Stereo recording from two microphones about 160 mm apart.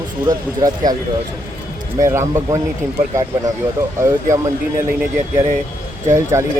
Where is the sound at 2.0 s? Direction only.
20° right (ahead or behind).